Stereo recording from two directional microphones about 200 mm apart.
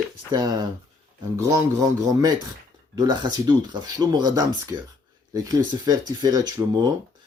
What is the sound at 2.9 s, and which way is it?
Speech, 20° right (ahead or behind).